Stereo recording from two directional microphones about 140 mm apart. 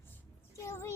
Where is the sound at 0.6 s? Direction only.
20° left (ahead or behind).